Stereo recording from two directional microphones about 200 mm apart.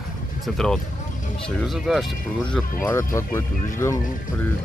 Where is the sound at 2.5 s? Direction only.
10° left (ahead or behind).